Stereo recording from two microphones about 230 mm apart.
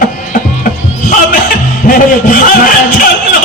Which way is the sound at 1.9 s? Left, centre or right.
Left.